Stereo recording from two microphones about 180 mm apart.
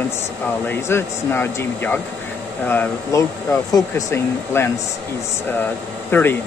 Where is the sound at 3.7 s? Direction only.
15° left (ahead or behind).